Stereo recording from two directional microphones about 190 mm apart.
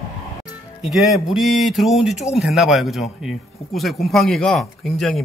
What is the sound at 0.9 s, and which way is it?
Speech, centre (ahead or behind).